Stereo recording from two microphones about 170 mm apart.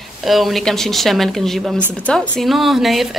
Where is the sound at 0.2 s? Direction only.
Centre (ahead or behind).